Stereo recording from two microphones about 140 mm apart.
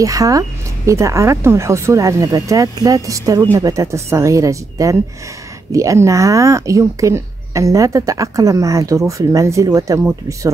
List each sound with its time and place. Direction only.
0.0 s speech: 25° right (ahead or behind)